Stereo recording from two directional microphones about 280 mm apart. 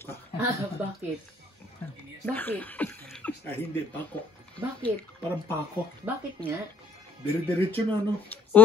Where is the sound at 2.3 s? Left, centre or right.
Centre.